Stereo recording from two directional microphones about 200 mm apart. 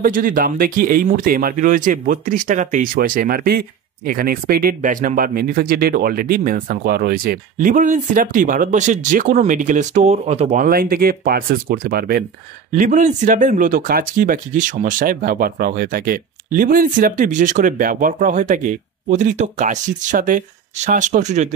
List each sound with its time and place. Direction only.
0.0 s speech: 45° right (ahead or behind)